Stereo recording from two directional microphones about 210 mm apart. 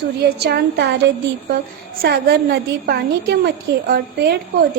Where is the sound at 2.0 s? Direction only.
50° right (ahead or behind).